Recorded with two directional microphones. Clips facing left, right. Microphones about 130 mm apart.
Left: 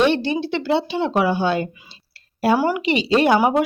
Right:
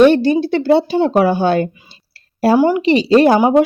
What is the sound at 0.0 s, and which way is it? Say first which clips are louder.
Speech: right 8 dB; 45° right (ahead or behind).